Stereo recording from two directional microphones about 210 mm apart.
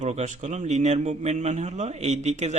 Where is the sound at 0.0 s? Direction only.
30° right (ahead or behind).